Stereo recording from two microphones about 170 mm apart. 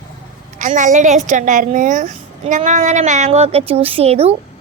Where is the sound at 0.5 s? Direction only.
50° right (ahead or behind).